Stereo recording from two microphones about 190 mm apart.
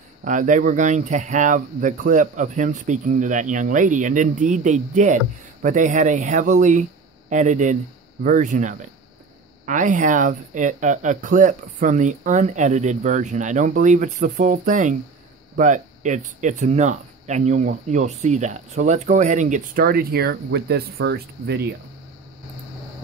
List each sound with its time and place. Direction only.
0.2 s speech: 40° right (ahead or behind); by 21.7 s 60° right (ahead or behind)